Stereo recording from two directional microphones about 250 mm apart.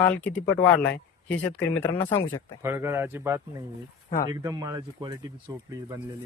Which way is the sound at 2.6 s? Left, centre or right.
Centre.